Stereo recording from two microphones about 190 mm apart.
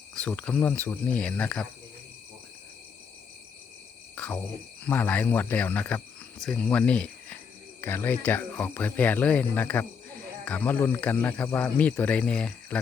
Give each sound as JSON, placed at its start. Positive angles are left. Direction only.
{"t": 0.1, "sound": "speech", "side_deg": 5}
{"t": 4.1, "sound": "speech", "side_deg": 10}